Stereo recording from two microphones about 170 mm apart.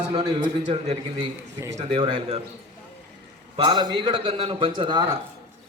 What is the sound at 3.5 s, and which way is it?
A man's voice, 30° right (ahead or behind).